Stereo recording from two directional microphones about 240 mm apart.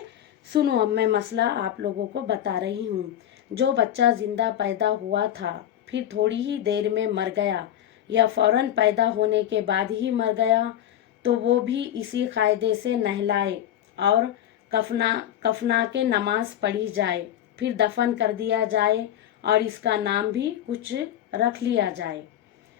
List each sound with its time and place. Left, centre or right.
0.5 s a woman's voice: right
3.8 s a woman's voice: right